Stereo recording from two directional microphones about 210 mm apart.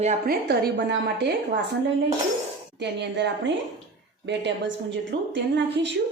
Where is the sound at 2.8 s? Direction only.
55° right (ahead or behind).